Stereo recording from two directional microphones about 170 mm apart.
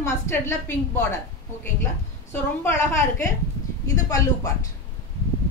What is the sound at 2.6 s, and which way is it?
A woman's voice, 15° left (ahead or behind).